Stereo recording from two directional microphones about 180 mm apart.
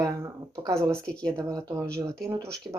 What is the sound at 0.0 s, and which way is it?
Speech, 20° right (ahead or behind).